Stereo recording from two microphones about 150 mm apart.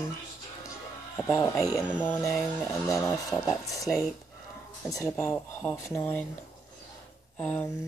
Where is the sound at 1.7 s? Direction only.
10° right (ahead or behind).